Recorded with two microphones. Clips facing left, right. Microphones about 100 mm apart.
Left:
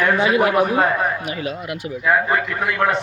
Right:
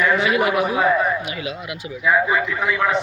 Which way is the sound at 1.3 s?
40° left (ahead or behind).